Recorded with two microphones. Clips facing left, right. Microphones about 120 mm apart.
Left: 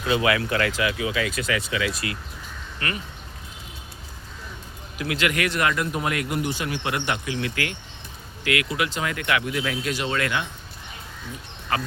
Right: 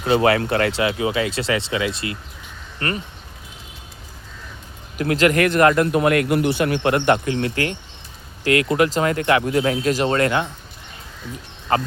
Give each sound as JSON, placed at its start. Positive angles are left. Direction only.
{"t": 0.0, "sound": "speech", "side_deg": -35}
{"t": 4.9, "sound": "a man's voice", "side_deg": -40}
{"t": 8.6, "sound": "speech", "side_deg": -45}
{"t": 11.7, "sound": "speech", "side_deg": -30}